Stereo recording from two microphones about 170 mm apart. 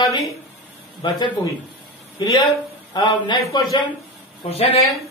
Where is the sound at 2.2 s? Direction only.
25° left (ahead or behind).